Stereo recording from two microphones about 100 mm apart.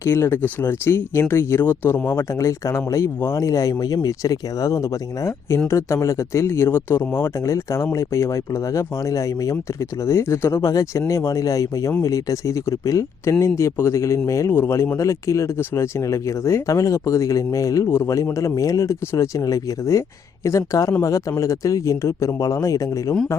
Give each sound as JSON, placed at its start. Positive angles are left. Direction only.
{"t": 0.0, "sound": "speech", "side_deg": 25}